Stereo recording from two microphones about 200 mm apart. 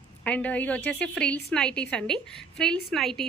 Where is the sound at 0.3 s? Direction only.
5° left (ahead or behind).